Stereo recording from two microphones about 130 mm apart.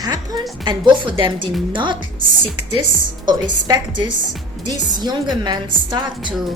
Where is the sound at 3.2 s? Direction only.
35° right (ahead or behind).